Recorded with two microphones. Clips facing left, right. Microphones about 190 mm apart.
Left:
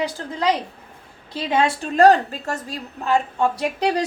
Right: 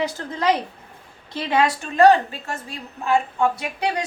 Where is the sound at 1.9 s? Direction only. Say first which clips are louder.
Even; 40° left (ahead or behind).